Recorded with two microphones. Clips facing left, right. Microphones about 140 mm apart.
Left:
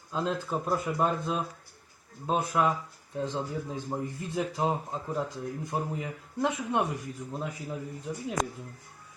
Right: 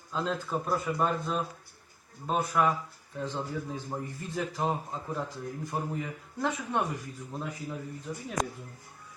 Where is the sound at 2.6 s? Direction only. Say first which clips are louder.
Even; 20° left (ahead or behind).